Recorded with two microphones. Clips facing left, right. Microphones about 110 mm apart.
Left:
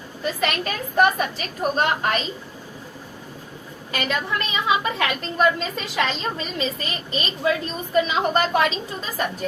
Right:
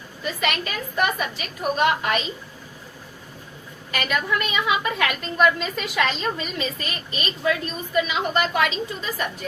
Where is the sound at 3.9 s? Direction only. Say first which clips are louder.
Right 1 dB; 30° left (ahead or behind).